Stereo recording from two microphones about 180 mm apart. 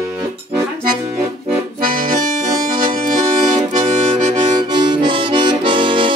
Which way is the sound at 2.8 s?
45° right (ahead or behind).